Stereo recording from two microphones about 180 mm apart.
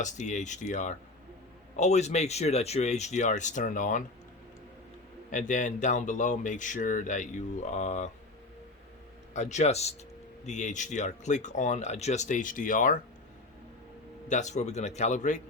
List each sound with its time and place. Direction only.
0.0 s speech: 40° left (ahead or behind)
5.3 s speech: 45° left (ahead or behind)
9.3 s speech: 40° left (ahead or behind)
14.3 s speech: 40° left (ahead or behind)